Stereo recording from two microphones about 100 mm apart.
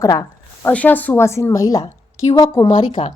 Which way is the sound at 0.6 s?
15° left (ahead or behind).